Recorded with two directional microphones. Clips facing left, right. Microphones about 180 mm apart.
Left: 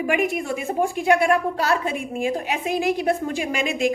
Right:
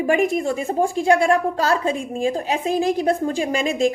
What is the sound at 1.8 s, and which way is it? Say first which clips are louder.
A woman's voice: right 3 dB; 30° right (ahead or behind).